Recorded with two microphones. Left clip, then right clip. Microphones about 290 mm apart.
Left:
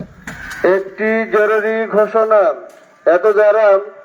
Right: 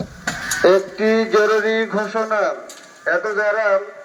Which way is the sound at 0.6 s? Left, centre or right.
Centre.